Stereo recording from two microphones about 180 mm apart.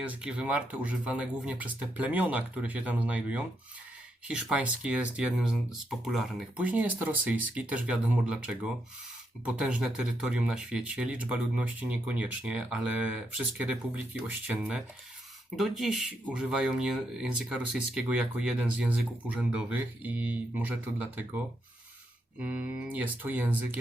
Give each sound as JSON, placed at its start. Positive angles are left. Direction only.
{"t": 0.0, "sound": "speech", "side_deg": -5}
{"t": 22.4, "sound": "speech", "side_deg": -5}